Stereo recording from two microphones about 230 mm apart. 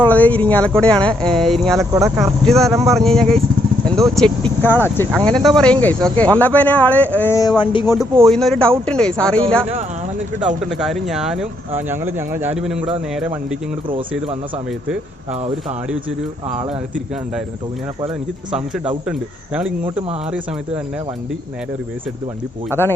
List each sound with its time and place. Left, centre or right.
0.0 s speech: centre
1.9 s speech: centre
2.1 s speech: centre; by 7.9 s left
8.2 s speech: centre
10.4 s speech: centre
16.6 s speech: right
18.5 s speech: centre
22.8 s speech: centre